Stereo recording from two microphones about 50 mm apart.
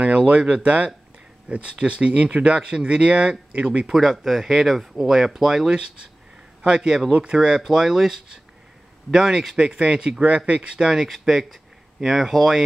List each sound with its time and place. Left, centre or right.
0.3 s speech: right
3.8 s speech: centre